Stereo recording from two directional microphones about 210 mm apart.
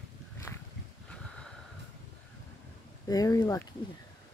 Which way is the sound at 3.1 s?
15° left (ahead or behind).